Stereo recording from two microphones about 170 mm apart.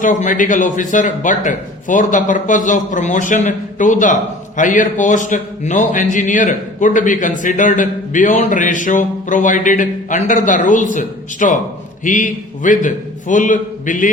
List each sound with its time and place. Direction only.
0.0 s a man's voice: 50° left (ahead or behind)